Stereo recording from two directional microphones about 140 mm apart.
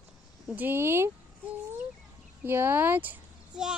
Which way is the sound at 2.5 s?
15° right (ahead or behind).